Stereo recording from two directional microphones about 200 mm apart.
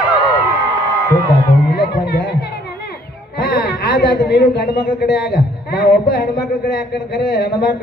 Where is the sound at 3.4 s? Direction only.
45° left (ahead or behind).